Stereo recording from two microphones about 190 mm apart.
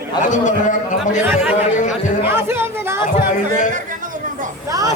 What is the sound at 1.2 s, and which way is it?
Speech, 5° right (ahead or behind).